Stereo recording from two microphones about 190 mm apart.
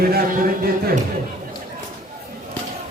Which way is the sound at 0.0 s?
50° right (ahead or behind).